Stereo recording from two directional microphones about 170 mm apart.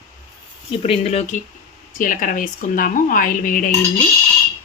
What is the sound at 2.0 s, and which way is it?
Speech, 55° left (ahead or behind).